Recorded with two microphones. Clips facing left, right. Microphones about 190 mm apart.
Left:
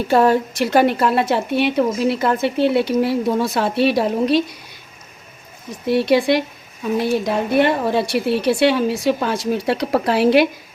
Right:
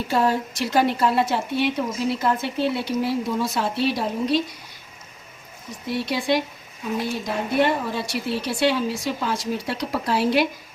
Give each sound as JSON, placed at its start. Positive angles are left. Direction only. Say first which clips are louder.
{"t": 0.1, "sound": "a woman's voice", "louder": "left 7 dB", "side_deg": 65}
{"t": 5.9, "sound": "a woman's voice", "louder": "left 8 dB", "side_deg": 70}